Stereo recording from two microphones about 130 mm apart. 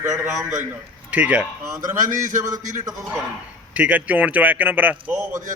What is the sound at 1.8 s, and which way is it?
Speech, 90° right.